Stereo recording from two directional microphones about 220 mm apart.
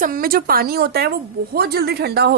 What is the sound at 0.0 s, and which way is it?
A woman's voice, 40° right (ahead or behind).